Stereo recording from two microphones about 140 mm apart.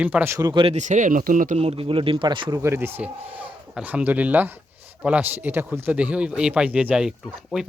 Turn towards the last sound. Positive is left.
turn(degrees=-5)  # may be behind; listen again after turning